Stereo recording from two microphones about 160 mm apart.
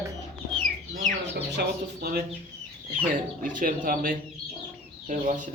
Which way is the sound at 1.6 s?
80° right.